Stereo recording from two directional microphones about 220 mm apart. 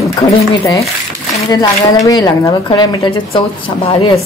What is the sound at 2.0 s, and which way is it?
A woman's voice, 15° left (ahead or behind).